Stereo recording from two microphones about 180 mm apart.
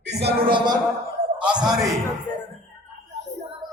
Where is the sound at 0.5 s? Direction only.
25° right (ahead or behind).